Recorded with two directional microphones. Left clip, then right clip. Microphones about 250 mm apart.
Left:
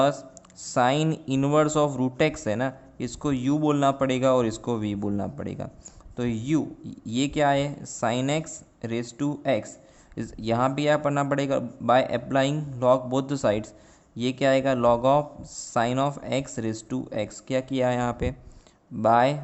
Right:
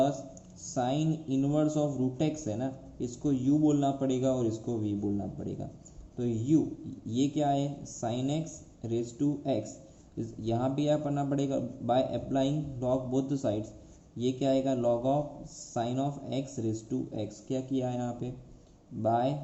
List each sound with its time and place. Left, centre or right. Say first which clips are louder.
0.7 s speech: left 9 dB; left